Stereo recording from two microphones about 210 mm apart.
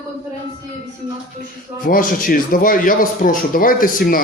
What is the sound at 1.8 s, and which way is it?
Speech, 40° left (ahead or behind).